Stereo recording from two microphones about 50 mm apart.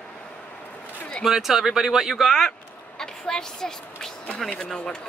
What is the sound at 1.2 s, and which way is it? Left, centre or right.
Speech, centre.